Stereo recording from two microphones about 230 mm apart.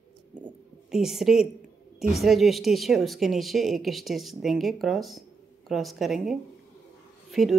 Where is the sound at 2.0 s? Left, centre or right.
Centre.